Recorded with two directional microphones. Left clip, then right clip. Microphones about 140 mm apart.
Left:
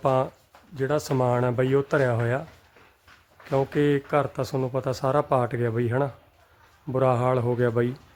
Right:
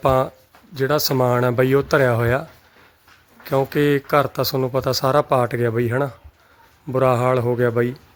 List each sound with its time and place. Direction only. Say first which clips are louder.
0.0 s speech: right 5 dB; 20° right (ahead or behind)
3.5 s speech: right 5 dB; 25° right (ahead or behind)